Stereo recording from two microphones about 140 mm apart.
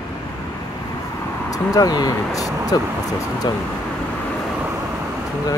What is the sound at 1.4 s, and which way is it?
Speech, 25° left (ahead or behind).